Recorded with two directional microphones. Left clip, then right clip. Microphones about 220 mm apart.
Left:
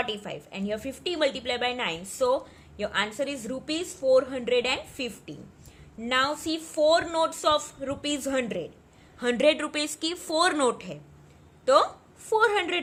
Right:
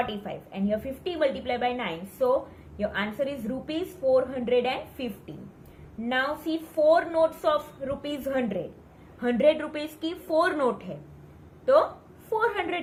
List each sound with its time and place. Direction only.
0.0 s a woman's voice: 50° left (ahead or behind)